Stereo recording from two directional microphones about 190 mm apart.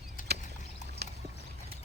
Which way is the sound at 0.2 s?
45° left (ahead or behind).